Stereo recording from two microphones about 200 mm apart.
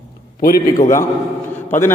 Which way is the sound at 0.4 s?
45° left (ahead or behind).